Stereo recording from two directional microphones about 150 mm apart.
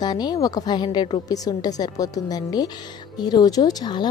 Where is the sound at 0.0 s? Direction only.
25° left (ahead or behind).